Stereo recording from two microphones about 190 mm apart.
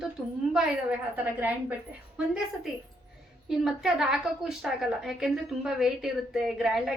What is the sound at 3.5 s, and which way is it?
A woman's voice, centre (ahead or behind).